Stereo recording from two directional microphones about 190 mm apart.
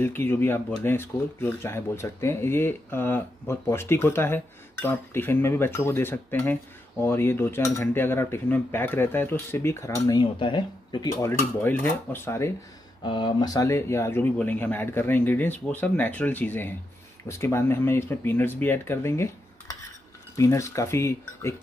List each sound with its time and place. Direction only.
0.0 s speech: 10° left (ahead or behind)
13.0 s speech: 25° left (ahead or behind)
20.3 s speech: 15° left (ahead or behind)